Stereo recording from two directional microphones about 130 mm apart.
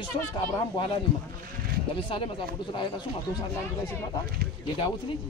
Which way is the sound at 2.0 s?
40° left (ahead or behind).